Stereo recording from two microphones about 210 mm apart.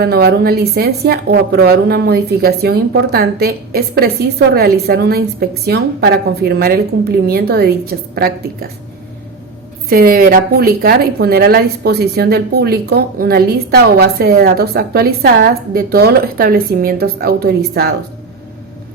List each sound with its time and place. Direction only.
0.0 s a woman's voice: 50° right (ahead or behind)
9.9 s a woman's voice: 45° right (ahead or behind)